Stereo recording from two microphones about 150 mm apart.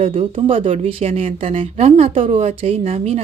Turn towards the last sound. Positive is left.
turn(degrees=-40)  # may be behind; listen again after turning